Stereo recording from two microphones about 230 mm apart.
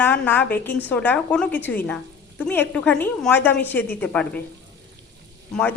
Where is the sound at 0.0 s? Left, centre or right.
Centre.